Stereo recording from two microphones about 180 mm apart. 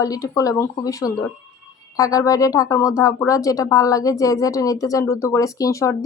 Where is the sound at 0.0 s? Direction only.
20° left (ahead or behind).